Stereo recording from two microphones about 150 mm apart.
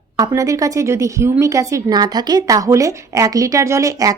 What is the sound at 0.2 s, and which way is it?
A woman's voice, 20° right (ahead or behind).